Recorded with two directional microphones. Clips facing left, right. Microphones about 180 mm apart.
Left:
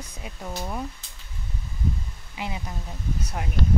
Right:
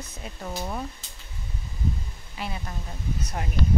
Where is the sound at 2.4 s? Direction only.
15° left (ahead or behind).